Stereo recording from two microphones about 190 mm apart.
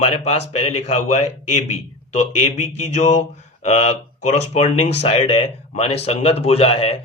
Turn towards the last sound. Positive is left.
turn(degrees=30)  # may be behind; listen again after turning